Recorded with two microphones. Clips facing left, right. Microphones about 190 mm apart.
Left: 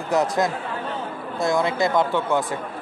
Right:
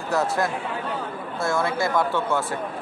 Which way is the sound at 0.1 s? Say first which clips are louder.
Left 2 dB; 20° left (ahead or behind).